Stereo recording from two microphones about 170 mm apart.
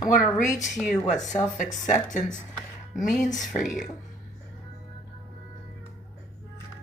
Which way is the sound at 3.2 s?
50° left (ahead or behind).